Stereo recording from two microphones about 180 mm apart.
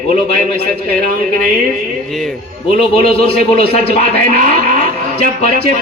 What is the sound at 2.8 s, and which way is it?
Speech, 30° left (ahead or behind).